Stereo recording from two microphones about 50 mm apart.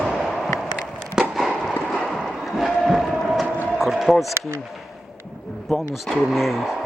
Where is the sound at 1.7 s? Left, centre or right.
Centre.